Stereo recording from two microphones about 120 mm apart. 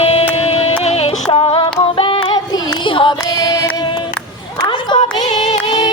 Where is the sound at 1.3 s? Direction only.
55° left (ahead or behind); by 4.0 s 35° left (ahead or behind).